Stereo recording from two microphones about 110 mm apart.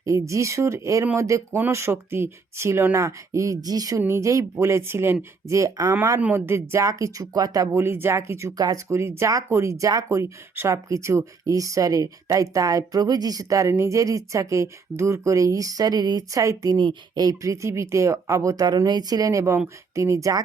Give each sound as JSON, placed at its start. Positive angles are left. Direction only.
{"t": 0.0, "sound": "speech", "side_deg": -30}
{"t": 6.1, "sound": "speech", "side_deg": -20}
{"t": 7.8, "sound": "speech", "side_deg": -20}